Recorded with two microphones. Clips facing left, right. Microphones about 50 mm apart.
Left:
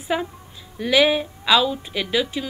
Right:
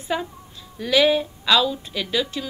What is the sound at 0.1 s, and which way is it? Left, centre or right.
A woman's voice, centre.